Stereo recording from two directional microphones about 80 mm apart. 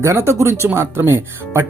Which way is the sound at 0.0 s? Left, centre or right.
Right.